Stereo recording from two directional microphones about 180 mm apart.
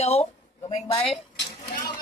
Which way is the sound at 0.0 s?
35° left (ahead or behind).